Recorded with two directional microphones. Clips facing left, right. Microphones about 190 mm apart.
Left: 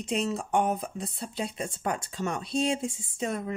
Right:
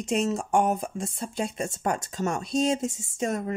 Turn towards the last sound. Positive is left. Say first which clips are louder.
# right 3 dB
turn(degrees=-45)  # may be behind; listen again after turning